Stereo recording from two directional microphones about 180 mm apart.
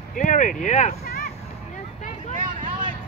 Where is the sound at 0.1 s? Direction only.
45° left (ahead or behind).